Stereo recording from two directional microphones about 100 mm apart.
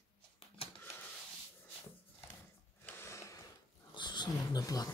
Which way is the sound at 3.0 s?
30° left (ahead or behind).